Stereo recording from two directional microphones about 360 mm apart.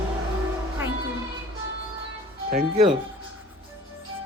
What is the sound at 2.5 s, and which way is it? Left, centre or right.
Speech, right.